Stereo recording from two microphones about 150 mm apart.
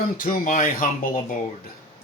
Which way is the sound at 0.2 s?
70° left (ahead or behind).